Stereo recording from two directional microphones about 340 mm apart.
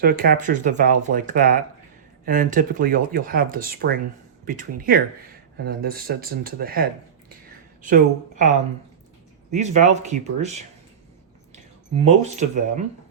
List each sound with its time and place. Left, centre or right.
0.0 s a woman's voice: right
12.0 s speech: right